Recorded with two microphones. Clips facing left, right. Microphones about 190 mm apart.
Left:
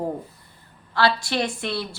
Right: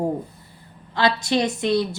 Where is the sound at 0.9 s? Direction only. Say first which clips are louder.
Right 2 dB; 20° right (ahead or behind).